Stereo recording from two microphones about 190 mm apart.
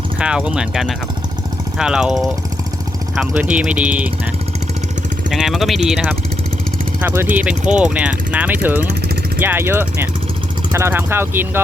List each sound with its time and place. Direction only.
0.2 s speech: 5° right (ahead or behind)
3.5 s speech: 5° right (ahead or behind)
5.3 s speech: centre (ahead or behind)